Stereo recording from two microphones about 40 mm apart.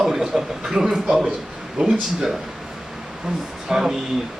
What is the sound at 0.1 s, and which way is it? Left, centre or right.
A man's voice, centre.